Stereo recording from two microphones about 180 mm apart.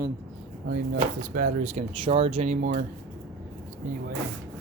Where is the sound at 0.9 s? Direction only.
55° right (ahead or behind).